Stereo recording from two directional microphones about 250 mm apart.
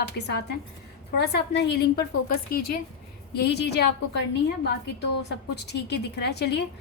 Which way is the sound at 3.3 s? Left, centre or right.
Left.